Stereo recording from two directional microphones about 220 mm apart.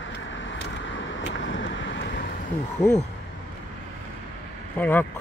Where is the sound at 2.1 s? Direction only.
45° left (ahead or behind).